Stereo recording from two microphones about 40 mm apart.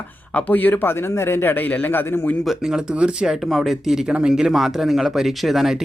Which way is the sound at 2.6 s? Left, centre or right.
Centre.